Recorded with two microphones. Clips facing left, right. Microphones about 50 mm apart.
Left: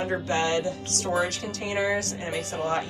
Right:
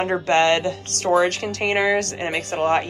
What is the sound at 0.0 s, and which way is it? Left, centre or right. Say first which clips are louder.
Speech: right 8 dB; right.